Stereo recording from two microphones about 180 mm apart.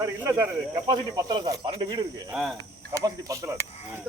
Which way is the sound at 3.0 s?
20° right (ahead or behind).